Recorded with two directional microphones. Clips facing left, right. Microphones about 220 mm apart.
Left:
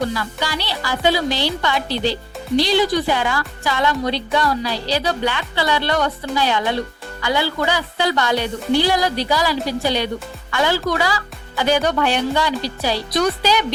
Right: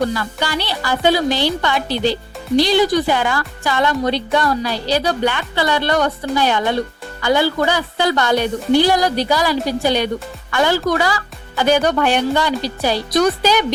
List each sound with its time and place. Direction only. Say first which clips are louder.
0.1 s a woman's voice: right 3 dB; 50° right (ahead or behind)